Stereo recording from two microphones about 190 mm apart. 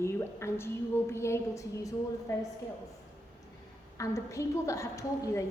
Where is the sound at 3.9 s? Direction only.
15° left (ahead or behind).